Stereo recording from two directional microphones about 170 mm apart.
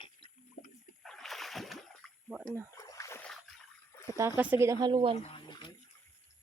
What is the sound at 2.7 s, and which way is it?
Rowboat, 20° left (ahead or behind).